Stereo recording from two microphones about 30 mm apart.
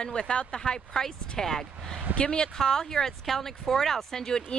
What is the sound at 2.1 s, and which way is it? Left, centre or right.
Speech, left.